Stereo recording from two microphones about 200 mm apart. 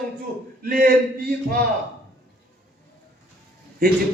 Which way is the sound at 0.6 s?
45° right (ahead or behind).